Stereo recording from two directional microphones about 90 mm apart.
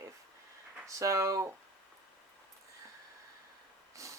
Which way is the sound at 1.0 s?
35° right (ahead or behind).